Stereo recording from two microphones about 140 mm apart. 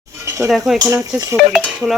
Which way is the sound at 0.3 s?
20° right (ahead or behind).